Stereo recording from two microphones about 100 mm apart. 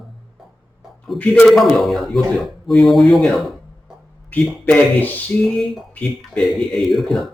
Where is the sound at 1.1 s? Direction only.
Centre (ahead or behind).